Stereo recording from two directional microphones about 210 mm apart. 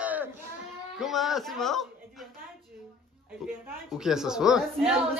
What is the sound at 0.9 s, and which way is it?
Speech, centre (ahead or behind).